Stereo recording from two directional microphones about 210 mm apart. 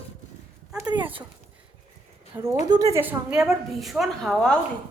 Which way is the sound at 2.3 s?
10° right (ahead or behind).